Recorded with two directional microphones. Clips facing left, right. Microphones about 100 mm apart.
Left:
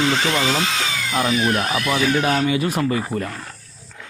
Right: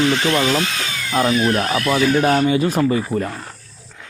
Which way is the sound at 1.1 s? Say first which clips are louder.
Right 3 dB; 35° right (ahead or behind).